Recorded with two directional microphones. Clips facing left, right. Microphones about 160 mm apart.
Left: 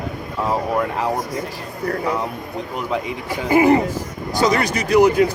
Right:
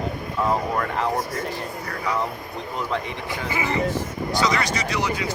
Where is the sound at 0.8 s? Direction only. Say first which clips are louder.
Left 3 dB; 10° left (ahead or behind).